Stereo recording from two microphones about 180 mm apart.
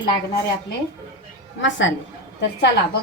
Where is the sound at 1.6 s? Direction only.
90° left.